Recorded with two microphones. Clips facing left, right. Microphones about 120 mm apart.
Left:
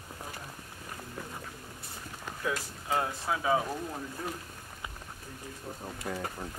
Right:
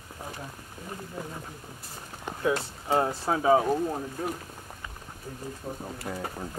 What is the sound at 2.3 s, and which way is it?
Speech, 30° right (ahead or behind).